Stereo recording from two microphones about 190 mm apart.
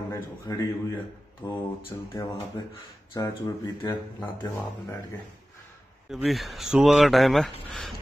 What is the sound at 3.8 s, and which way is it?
Speech, 15° left (ahead or behind).